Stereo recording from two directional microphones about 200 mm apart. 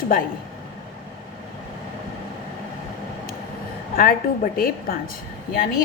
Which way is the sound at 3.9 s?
45° left (ahead or behind).